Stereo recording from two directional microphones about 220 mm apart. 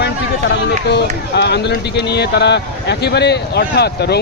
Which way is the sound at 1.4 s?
50° left (ahead or behind).